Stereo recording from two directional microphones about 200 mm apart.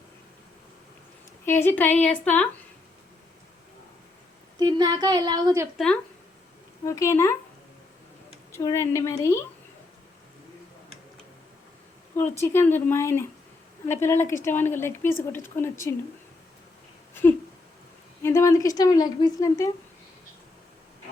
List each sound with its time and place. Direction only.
1.5 s speech: 10° left (ahead or behind)
4.6 s a sound: 20° right (ahead or behind)
5.7 s speech: 5° left (ahead or behind)
6.8 s speech: 15° left (ahead or behind)
8.5 s speech: 15° left (ahead or behind)
12.1 s speech: 10° left (ahead or behind)
18.2 s speech: 15° left (ahead or behind)